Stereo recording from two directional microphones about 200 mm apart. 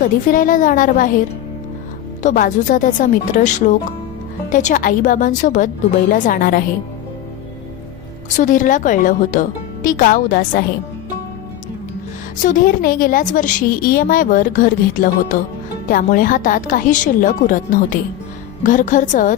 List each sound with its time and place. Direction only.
0.0 s a woman's voice: 40° left (ahead or behind)
2.2 s a woman's voice: 40° left (ahead or behind)
8.3 s a woman's voice: 40° left (ahead or behind)
12.4 s a woman's voice: 40° left (ahead or behind)